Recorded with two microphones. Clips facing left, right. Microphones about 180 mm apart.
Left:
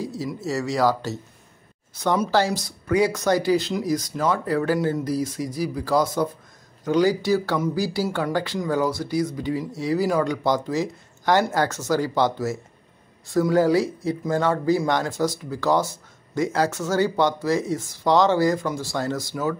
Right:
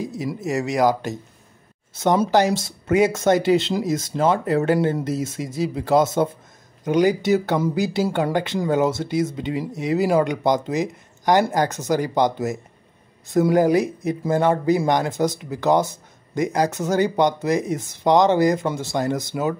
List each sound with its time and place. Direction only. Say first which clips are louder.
0.0 s speech: right 2 dB; 20° right (ahead or behind)